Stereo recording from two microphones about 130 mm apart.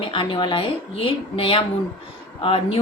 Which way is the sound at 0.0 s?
40° left (ahead or behind).